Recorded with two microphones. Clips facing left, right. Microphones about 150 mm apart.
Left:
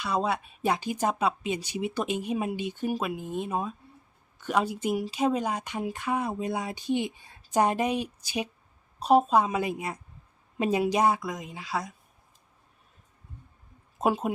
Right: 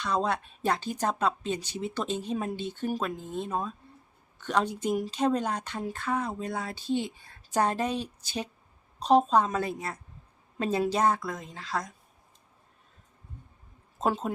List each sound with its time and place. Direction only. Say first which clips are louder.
0.0 s speech: even; 10° left (ahead or behind)
14.0 s speech: left 2 dB; 10° left (ahead or behind)